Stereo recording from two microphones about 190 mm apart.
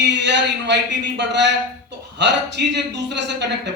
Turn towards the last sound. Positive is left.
turn(degrees=-65)  # may be behind; listen again after turning